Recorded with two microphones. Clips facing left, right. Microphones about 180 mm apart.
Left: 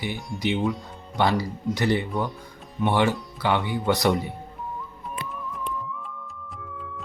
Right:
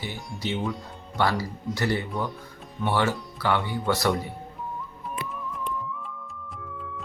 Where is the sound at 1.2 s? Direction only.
20° left (ahead or behind).